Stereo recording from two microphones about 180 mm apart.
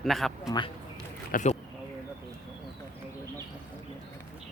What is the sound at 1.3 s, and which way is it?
Speech, 45° left (ahead or behind).